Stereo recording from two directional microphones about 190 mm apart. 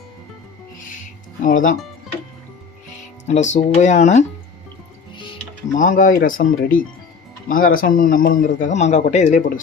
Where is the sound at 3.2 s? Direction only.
35° left (ahead or behind).